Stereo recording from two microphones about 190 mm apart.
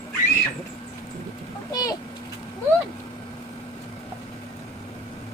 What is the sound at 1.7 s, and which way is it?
Speech, 20° left (ahead or behind).